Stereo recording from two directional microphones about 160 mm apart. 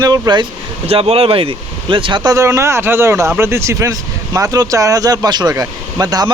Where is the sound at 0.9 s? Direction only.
35° right (ahead or behind).